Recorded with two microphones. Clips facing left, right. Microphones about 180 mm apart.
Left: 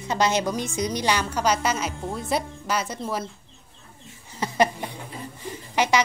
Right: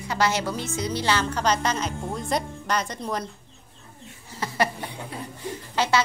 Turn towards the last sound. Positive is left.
turn(degrees=15)  # may be behind; listen again after turning